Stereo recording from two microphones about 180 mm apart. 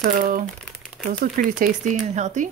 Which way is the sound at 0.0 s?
50° right (ahead or behind).